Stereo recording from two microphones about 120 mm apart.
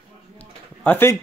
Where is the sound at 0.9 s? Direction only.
20° left (ahead or behind).